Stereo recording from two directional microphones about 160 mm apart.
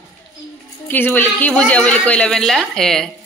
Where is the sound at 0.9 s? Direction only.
10° left (ahead or behind).